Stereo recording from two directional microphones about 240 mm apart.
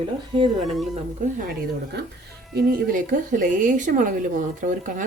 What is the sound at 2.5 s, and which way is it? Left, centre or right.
Speech, right.